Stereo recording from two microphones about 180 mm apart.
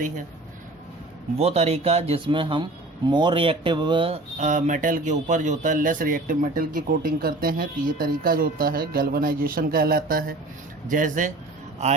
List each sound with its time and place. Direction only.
1.4 s speech: 35° right (ahead or behind)